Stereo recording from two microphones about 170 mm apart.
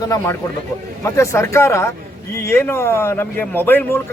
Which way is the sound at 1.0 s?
15° left (ahead or behind).